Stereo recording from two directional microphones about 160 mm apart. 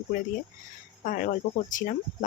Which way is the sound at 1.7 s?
55° left (ahead or behind).